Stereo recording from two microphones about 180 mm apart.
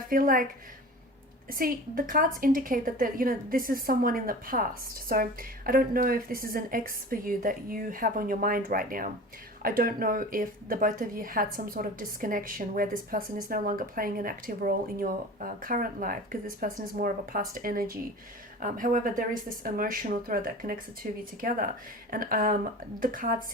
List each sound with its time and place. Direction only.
0.1 s a woman's voice: 50° right (ahead or behind)
1.5 s a woman's voice: 50° right (ahead or behind)